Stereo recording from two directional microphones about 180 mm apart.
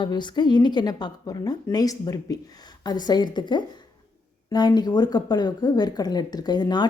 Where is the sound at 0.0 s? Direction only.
25° left (ahead or behind).